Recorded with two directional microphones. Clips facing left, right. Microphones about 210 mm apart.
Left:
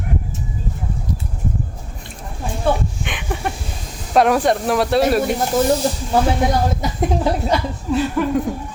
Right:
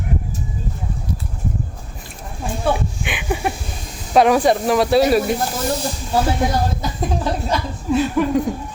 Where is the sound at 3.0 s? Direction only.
5° right (ahead or behind).